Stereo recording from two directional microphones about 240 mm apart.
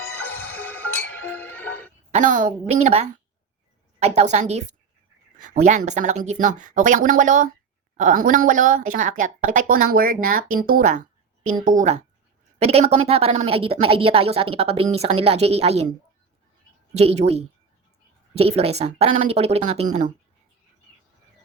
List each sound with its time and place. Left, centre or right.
0.0 s music: centre
2.1 s speech: right
12.5 s speech: right